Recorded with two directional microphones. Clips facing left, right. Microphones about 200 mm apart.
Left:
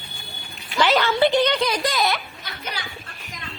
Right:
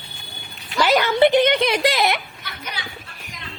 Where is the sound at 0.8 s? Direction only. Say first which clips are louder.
Right 2 dB; 10° right (ahead or behind).